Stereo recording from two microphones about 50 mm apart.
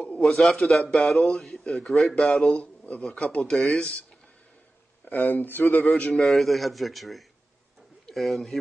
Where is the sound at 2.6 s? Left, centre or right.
Left.